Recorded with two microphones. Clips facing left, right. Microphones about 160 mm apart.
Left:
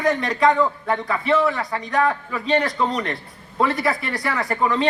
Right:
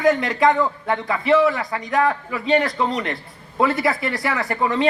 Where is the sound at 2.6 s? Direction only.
25° right (ahead or behind).